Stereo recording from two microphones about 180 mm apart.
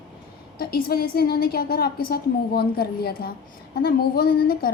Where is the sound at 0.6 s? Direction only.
55° left (ahead or behind).